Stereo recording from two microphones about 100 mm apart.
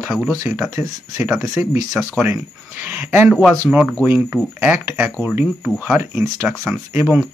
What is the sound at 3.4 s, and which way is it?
Speech, 10° right (ahead or behind).